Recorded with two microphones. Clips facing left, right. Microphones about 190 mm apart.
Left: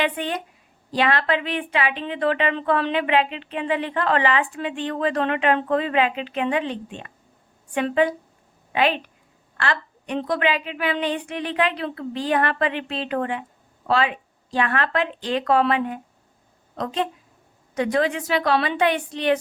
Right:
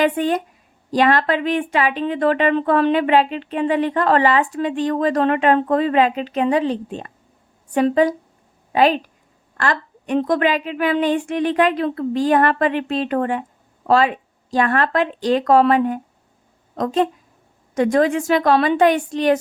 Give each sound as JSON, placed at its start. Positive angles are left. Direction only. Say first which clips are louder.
{"t": 0.0, "sound": "a woman's voice", "louder": "right 7 dB", "side_deg": -45}